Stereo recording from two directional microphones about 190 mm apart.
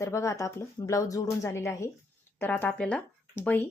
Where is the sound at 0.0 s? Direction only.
15° left (ahead or behind).